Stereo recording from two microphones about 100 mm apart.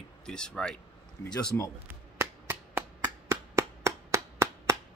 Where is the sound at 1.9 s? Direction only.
25° right (ahead or behind).